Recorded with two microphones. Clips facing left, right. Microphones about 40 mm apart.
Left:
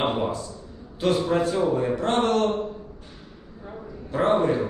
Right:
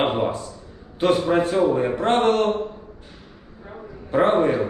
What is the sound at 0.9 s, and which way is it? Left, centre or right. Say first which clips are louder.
A man's voice: right 3 dB; right.